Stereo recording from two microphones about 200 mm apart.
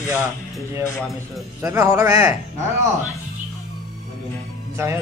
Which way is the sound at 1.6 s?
15° right (ahead or behind).